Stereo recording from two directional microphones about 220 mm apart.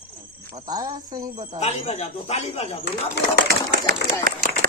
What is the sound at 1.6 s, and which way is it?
Speech, 30° left (ahead or behind).